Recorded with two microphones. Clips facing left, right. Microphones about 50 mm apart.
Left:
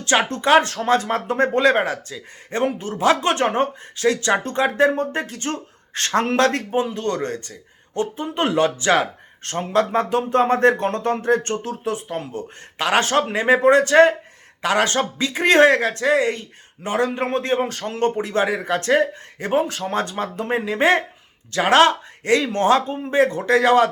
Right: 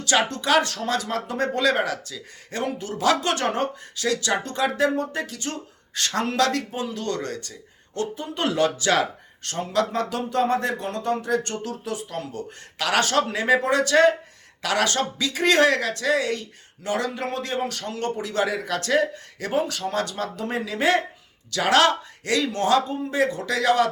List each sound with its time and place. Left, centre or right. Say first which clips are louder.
0.0 s speech: left 3 dB; left